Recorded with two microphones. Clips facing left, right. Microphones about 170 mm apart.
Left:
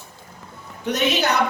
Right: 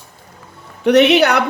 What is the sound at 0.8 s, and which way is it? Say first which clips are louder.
Speech: right 11 dB; 70° right (ahead or behind).